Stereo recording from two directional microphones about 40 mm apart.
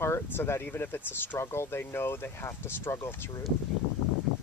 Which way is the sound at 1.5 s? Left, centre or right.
Left.